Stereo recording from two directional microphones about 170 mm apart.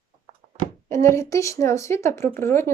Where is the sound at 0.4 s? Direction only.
50° right (ahead or behind).